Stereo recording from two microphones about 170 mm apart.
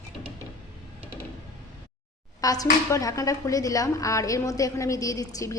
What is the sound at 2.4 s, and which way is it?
A woman's voice, 20° left (ahead or behind).